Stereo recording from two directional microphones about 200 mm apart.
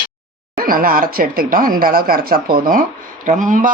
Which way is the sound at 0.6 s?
45° right (ahead or behind).